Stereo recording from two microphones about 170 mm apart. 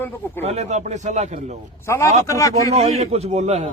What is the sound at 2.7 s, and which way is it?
Speech, 40° right (ahead or behind).